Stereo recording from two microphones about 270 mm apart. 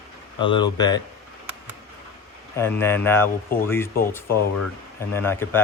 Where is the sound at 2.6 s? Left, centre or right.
Centre.